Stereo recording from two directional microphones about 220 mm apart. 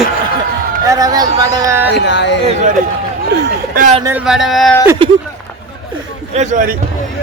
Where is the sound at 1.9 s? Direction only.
50° left (ahead or behind).